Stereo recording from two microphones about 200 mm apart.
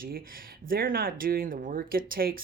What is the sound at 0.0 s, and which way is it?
Speech, 45° right (ahead or behind).